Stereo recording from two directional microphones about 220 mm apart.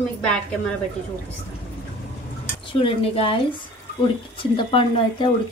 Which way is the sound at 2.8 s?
25° left (ahead or behind).